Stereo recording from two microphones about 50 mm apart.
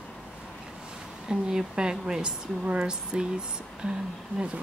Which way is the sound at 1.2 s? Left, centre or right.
Centre.